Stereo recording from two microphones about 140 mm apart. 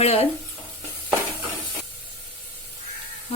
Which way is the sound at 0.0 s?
45° left (ahead or behind).